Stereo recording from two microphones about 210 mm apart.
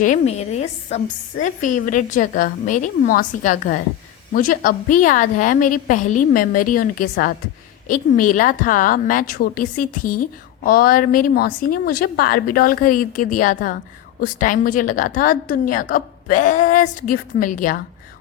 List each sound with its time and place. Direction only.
0.0 s a woman's voice: 35° left (ahead or behind)